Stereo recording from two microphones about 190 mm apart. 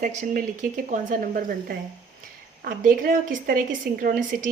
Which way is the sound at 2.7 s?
45° right (ahead or behind).